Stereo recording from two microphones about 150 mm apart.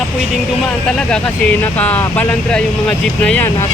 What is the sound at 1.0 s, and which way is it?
Speech, 5° left (ahead or behind).